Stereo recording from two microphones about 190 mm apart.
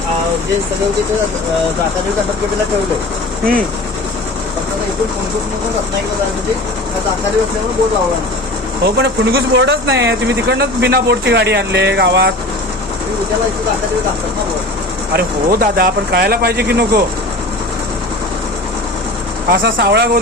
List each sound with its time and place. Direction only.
8.8 s speech: 60° right (ahead or behind)
15.1 s speech: 55° right (ahead or behind)
19.5 s speech: 60° right (ahead or behind)